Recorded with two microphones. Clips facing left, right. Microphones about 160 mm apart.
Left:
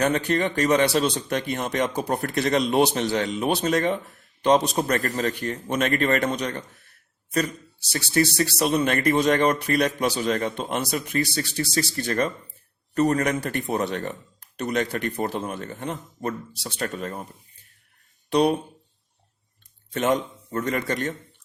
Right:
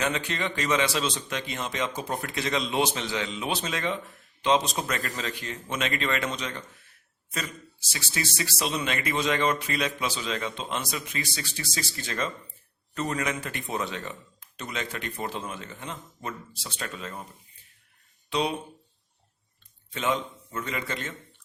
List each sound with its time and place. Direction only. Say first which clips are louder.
0.0 s a man's voice: left 7 dB; 45° left (ahead or behind)
0.7 s speech: left 5 dB; 50° left (ahead or behind)
2.0 s a man's voice: left 6 dB; 40° left (ahead or behind)
2.3 s speech: left 7 dB; 60° left (ahead or behind)
3.3 s a man's voice: left 8 dB; 45° left (ahead or behind)
4.4 s a man's voice: left 5 dB; 60° left (ahead or behind)
8.2 s a man's voice: left 9 dB; 65° left (ahead or behind)
11.2 s a man's voice: left 9 dB; 40° left (ahead or behind)
16.7 s a man's voice: left 7 dB; 45° left (ahead or behind)
18.3 s speech: left 8 dB; 55° left (ahead or behind)
20.1 s a man's voice: left 5 dB; 45° left (ahead or behind)